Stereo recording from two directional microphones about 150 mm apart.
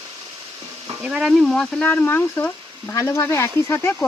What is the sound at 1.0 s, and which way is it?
Speech, 5° right (ahead or behind).